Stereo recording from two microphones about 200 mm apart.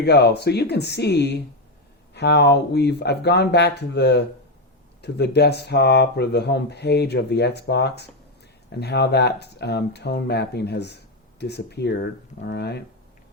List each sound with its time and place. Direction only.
0.0 s speech: 55° left (ahead or behind)